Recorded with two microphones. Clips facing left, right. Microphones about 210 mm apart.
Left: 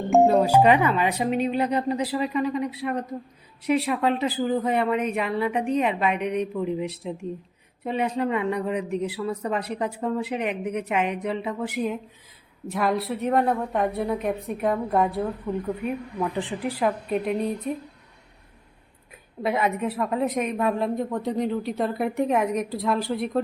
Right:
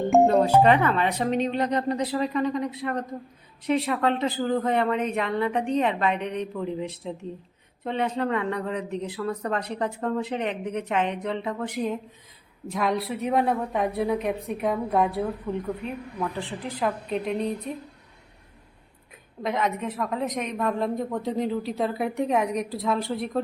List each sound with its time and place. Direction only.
0.1 s a woman's voice: centre (ahead or behind)
16.4 s speech: 15° left (ahead or behind)
16.8 s a woman's voice: 5° left (ahead or behind)
19.4 s a woman's voice: 10° left (ahead or behind)